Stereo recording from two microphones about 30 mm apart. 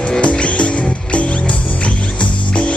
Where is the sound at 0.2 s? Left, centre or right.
Left.